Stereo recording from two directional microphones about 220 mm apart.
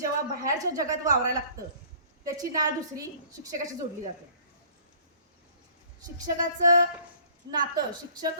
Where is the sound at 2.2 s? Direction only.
15° right (ahead or behind).